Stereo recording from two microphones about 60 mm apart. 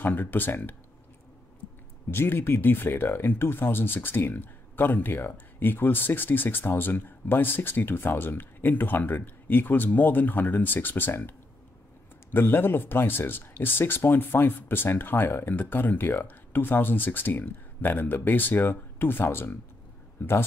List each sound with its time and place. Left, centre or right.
0.0 s speech: left
2.0 s a man's voice: left